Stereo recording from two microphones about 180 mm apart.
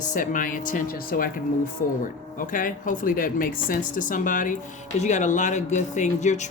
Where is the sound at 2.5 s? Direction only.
50° left (ahead or behind).